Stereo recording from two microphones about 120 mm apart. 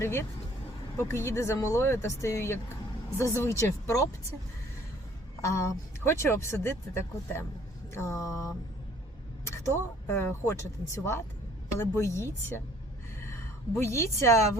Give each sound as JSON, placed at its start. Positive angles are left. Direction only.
{"t": 0.0, "sound": "speech", "side_deg": 20}
{"t": 5.4, "sound": "a woman's voice", "side_deg": 25}